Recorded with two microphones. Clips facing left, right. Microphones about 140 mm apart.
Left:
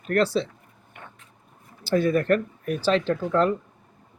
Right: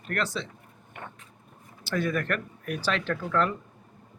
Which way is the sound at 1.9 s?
30° left (ahead or behind).